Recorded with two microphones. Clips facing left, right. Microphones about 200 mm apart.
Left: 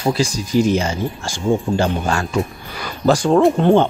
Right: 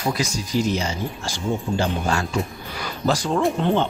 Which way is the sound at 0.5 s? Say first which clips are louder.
Left 6 dB; 50° left (ahead or behind).